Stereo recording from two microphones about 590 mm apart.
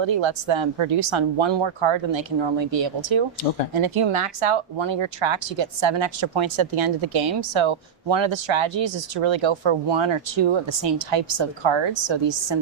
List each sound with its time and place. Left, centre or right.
0.0 s speech: right